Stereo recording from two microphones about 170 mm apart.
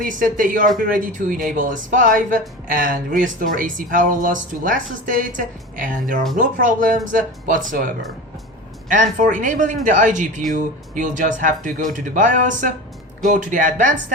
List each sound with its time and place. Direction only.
0.0 s speech: 50° right (ahead or behind)
8.9 s speech: 50° right (ahead or behind)